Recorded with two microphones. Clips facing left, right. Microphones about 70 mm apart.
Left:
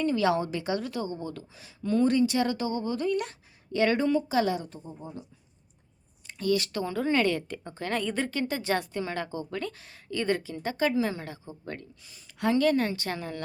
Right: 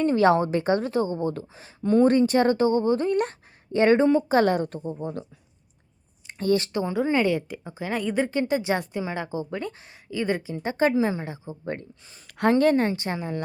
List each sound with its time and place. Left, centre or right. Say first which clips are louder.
0.0 s a woman's voice: right 6 dB; right
4.3 s a woman's voice: right 6 dB; right
6.2 s a sound: right 4 dB; right
6.7 s a woman's voice: right 3 dB; centre
12.3 s a woman's voice: right 5 dB; right